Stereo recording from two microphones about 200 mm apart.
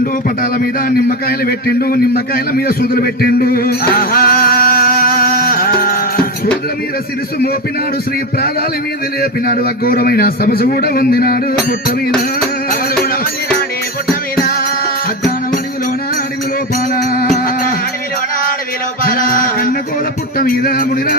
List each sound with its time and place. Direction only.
0.9 s a man's voice: 50° left (ahead or behind)
9.2 s a man's voice: 50° left (ahead or behind)
16.7 s music: 45° left (ahead or behind)
19.0 s music: 45° left (ahead or behind)
20.4 s a man's voice: 45° left (ahead or behind)